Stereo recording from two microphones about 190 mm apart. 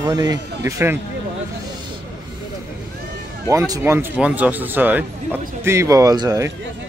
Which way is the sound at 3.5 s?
15° right (ahead or behind).